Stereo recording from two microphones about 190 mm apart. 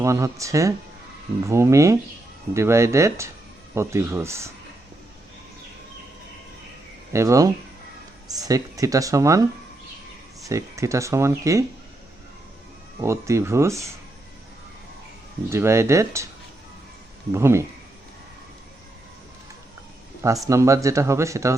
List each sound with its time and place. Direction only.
0.0 s speech: 15° right (ahead or behind)
7.1 s speech: 15° right (ahead or behind)
10.5 s speech: 15° right (ahead or behind)
13.0 s speech: 15° right (ahead or behind)
15.4 s speech: 15° right (ahead or behind)
17.3 s speech: 15° right (ahead or behind)
20.2 s speech: 15° right (ahead or behind)